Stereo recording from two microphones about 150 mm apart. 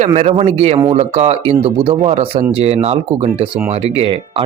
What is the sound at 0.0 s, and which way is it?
A man's voice, 45° right (ahead or behind).